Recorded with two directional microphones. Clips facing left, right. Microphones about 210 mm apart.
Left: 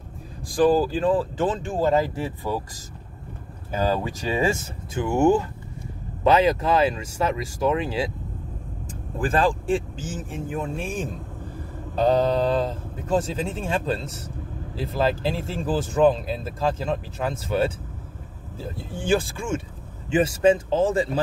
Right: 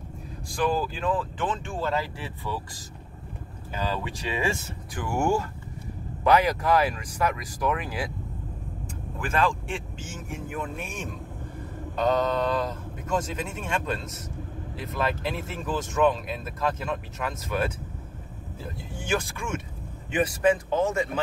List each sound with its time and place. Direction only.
0.5 s speech: 35° left (ahead or behind)
4.9 s speech: 20° left (ahead or behind)
9.2 s speech: 35° left (ahead or behind)